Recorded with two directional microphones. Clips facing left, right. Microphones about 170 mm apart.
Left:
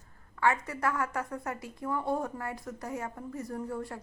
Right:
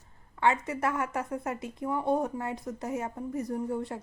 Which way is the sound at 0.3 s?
20° right (ahead or behind).